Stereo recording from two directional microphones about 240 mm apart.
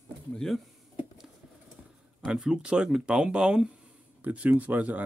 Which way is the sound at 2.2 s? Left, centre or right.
Centre.